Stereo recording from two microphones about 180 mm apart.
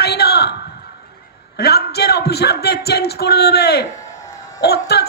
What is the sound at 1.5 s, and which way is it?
A man's voice, 65° left (ahead or behind).